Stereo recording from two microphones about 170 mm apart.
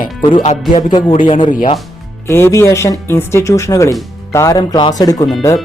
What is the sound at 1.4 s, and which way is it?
Speech, 55° left (ahead or behind).